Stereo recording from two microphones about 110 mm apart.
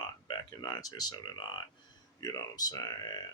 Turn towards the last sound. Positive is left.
turn(degrees=35)  # may be behind; listen again after turning